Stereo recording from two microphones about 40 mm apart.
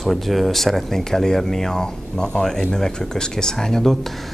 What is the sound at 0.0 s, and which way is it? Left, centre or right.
Speech, centre.